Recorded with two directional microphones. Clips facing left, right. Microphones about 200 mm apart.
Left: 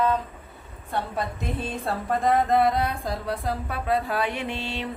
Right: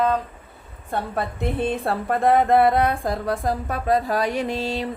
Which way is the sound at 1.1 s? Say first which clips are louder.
Right 5 dB; 60° right (ahead or behind).